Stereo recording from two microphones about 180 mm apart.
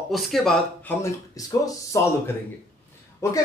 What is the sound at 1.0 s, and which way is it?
Speech, 15° left (ahead or behind).